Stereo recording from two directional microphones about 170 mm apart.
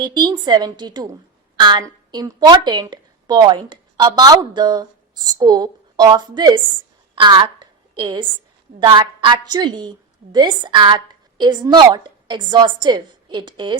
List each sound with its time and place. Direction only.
0.0 s a woman's voice: 25° right (ahead or behind)